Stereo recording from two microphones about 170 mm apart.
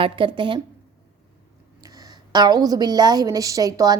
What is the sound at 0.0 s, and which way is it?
Speech, 30° right (ahead or behind).